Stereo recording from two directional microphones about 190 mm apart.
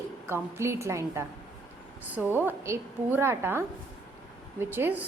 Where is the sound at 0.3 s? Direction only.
15° right (ahead or behind).